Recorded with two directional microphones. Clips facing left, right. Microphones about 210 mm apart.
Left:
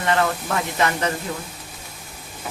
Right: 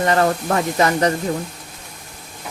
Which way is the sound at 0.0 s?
40° right (ahead or behind).